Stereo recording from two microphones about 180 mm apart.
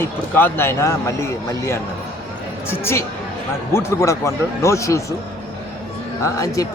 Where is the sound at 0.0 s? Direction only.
10° left (ahead or behind).